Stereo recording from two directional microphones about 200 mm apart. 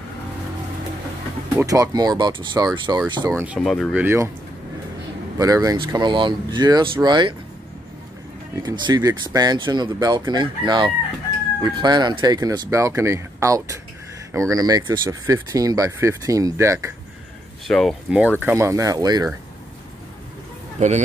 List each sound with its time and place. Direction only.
1.6 s speech: 15° right (ahead or behind)
3.5 s speech: centre (ahead or behind)
3.9 s speech: 10° right (ahead or behind)
5.4 s speech: 20° right (ahead or behind)
8.5 s speech: 20° right (ahead or behind)
17.6 s speech: centre (ahead or behind)
18.4 s speech: 15° right (ahead or behind)